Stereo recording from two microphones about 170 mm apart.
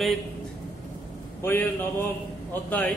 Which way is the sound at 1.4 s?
15° left (ahead or behind).